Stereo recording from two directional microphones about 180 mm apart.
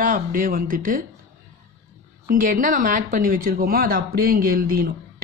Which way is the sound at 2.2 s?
50° right (ahead or behind).